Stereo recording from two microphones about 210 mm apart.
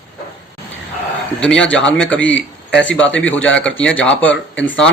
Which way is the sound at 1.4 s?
5° left (ahead or behind).